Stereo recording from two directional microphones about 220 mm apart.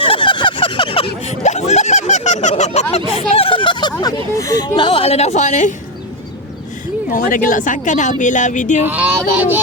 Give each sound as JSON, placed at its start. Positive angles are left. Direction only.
{"t": 0.0, "sound": "a sound", "side_deg": 25}
{"t": 3.1, "sound": "speech", "side_deg": 25}
{"t": 7.1, "sound": "speech", "side_deg": 40}
{"t": 8.8, "sound": "speech", "side_deg": -5}